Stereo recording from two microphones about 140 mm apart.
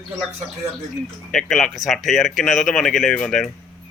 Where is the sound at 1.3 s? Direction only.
5° left (ahead or behind).